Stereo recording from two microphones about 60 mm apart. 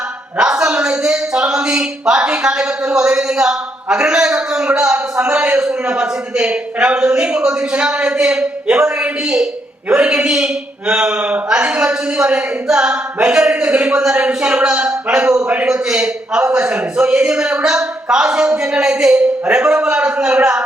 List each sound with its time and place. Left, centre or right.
0.3 s speech: centre
9.9 s a man's voice: centre